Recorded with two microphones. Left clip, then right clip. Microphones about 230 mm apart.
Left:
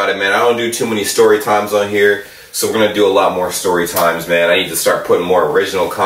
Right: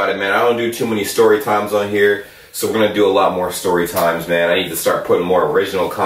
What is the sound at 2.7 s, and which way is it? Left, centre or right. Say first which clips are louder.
Speech: left 2 dB; centre.